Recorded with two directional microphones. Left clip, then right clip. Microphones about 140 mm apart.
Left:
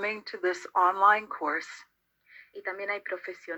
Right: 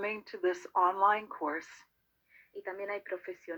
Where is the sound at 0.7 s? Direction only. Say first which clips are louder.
Left 5 dB; 40° left (ahead or behind).